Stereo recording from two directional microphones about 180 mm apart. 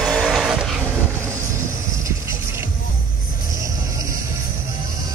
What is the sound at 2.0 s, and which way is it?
Music, 15° right (ahead or behind).